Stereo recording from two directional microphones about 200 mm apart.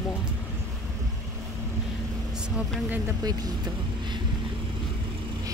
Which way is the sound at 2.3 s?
5° right (ahead or behind).